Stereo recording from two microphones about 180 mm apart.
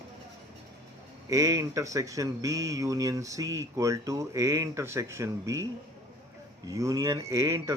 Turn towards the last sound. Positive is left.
turn(degrees=-15)  # may be behind; listen again after turning